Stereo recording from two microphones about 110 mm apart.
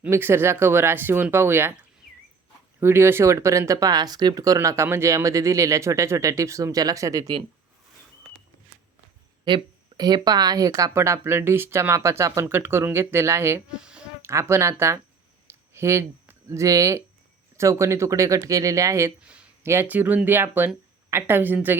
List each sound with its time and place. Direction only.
0.1 s speech: 20° right (ahead or behind)
2.8 s speech: 20° right (ahead or behind)
10.0 s speech: 40° right (ahead or behind)
13.7 s speech: 10° right (ahead or behind)
14.2 s speech: 25° right (ahead or behind)
15.4 s a sound: 25° right (ahead or behind)
17.6 s speech: 25° right (ahead or behind)
19.2 s a sound: 10° right (ahead or behind)
19.6 s speech: 20° right (ahead or behind)